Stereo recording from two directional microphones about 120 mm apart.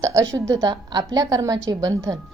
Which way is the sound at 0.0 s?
30° right (ahead or behind).